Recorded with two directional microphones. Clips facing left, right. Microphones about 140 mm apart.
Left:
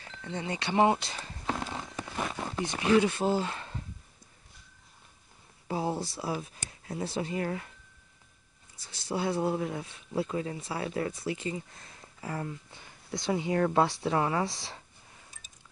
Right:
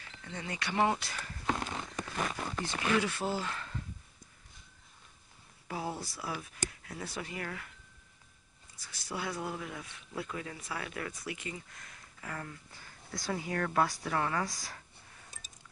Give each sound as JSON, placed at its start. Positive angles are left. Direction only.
{"t": 0.2, "sound": "speech", "side_deg": 25}
{"t": 1.6, "sound": "a sound", "side_deg": 20}
{"t": 2.9, "sound": "speech", "side_deg": 25}
{"t": 5.7, "sound": "speech", "side_deg": 25}
{"t": 8.7, "sound": "speech", "side_deg": 25}